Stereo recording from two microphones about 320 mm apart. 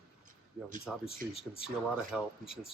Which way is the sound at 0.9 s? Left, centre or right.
Centre.